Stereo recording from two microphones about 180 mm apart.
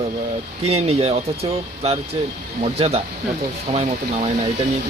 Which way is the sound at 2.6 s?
35° right (ahead or behind).